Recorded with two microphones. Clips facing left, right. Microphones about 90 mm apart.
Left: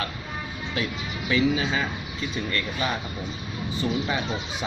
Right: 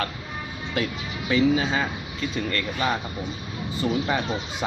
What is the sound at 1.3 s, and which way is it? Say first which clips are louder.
Speech: right 2 dB; 40° right (ahead or behind).